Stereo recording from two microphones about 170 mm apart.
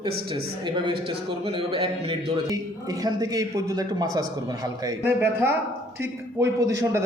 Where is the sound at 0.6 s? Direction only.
30° right (ahead or behind).